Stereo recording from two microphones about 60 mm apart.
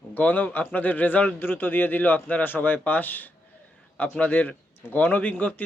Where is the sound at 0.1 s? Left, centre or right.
Left.